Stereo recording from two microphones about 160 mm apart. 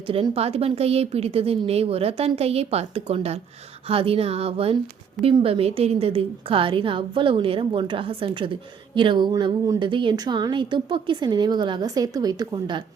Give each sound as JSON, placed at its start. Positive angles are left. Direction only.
{"t": 0.1, "sound": "a woman's voice", "side_deg": -35}